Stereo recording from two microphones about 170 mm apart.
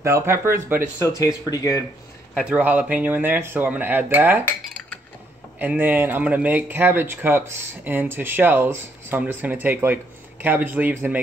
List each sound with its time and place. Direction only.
0.0 s speech: 15° right (ahead or behind)
1.0 s speech: 20° left (ahead or behind)
2.3 s speech: 10° right (ahead or behind)
5.6 s speech: 10° right (ahead or behind)